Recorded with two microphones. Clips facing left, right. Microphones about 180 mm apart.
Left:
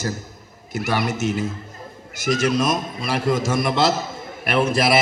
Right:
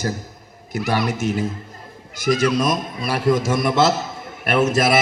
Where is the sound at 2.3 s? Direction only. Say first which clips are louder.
Right 1 dB; 50° left (ahead or behind).